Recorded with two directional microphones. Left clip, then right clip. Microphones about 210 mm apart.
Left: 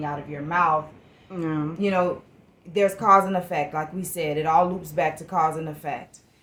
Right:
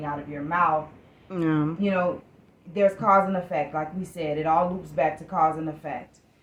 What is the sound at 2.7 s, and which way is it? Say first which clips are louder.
A woman's voice: left 2 dB; 40° left (ahead or behind).